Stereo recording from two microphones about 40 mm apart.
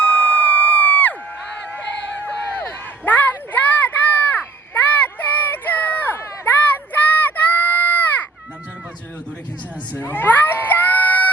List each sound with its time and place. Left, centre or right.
0.0 s emergency vehicle: left
1.7 s a sound: left
9.9 s crowd: left